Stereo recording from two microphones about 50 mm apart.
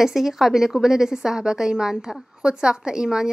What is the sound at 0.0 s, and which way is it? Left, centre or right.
A woman's voice, centre.